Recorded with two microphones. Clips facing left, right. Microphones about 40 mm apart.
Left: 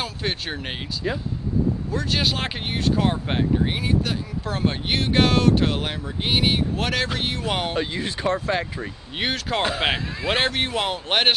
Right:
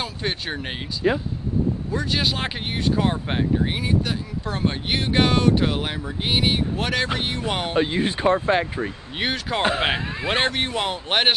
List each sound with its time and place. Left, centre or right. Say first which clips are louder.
0.0 s speech: even; centre
1.0 s speech: right 6 dB; centre
1.9 s speech: even; centre
7.7 s speech: right 4 dB; right
9.1 s speech: left 1 dB; centre